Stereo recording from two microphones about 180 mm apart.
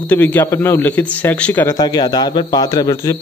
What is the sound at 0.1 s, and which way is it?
A man's voice, 10° left (ahead or behind).